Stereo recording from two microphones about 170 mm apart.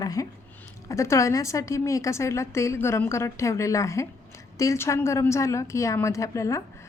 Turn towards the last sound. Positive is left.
turn(degrees=20)  # may be behind; listen again after turning